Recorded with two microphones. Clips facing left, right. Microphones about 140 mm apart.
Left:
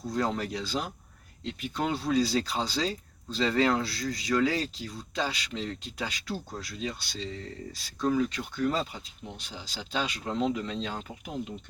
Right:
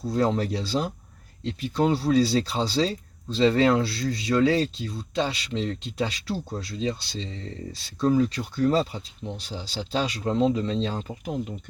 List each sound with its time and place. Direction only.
0.0 s speech: 30° right (ahead or behind)